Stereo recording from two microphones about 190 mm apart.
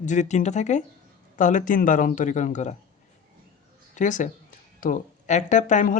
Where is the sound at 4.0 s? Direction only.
40° left (ahead or behind).